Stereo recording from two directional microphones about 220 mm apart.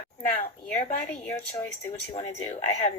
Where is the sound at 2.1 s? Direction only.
25° left (ahead or behind).